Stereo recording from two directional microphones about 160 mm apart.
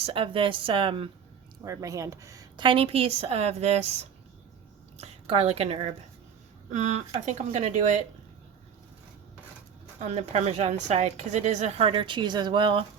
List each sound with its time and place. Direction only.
0.0 s speech: 35° right (ahead or behind)
1.6 s a woman's voice: 20° right (ahead or behind); by 8.0 s 45° right (ahead or behind)
10.0 s a woman's voice: 45° right (ahead or behind)